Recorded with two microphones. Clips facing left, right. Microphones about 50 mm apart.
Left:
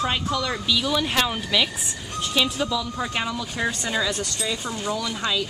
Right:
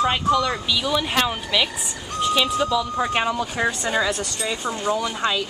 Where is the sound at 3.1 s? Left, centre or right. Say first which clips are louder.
Right 5 dB; right.